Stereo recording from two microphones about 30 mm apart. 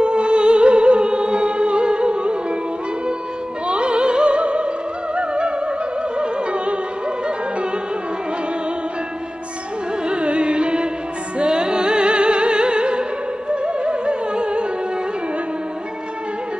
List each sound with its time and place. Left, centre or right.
0.0 s music: right
3.6 s opera: right
5.1 s music: right
10.0 s music: right